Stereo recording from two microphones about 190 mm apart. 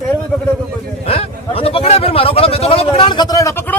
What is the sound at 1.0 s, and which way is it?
A man's voice, 30° left (ahead or behind).